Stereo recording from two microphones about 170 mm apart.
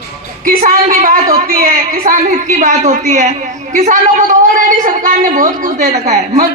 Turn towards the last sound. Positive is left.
turn(degrees=-50)  # may be behind; listen again after turning